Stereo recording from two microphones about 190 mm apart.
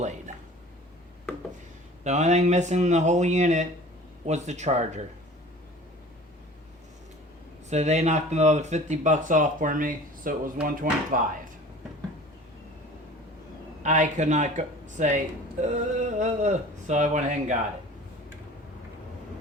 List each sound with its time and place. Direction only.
2.0 s speech: 35° right (ahead or behind)
7.7 s speech: 35° right (ahead or behind)
13.8 s speech: 40° right (ahead or behind)